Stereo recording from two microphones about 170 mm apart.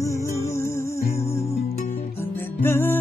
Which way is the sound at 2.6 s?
10° left (ahead or behind).